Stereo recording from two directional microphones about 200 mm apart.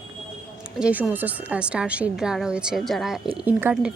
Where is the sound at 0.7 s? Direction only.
5° right (ahead or behind).